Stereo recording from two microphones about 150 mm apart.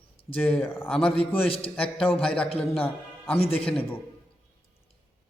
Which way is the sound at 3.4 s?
40° left (ahead or behind).